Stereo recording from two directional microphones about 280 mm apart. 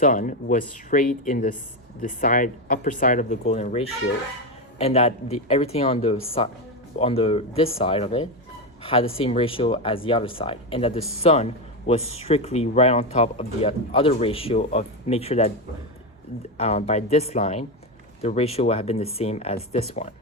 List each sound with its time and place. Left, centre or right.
0.0 s speech: left
16.6 s speech: left